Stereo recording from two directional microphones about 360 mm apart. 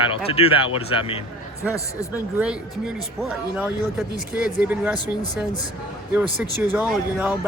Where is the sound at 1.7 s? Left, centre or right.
Centre.